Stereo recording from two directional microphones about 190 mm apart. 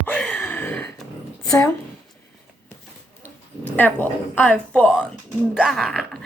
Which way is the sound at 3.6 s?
10° left (ahead or behind).